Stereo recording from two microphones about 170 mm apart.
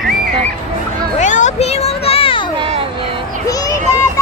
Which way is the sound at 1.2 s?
45° left (ahead or behind).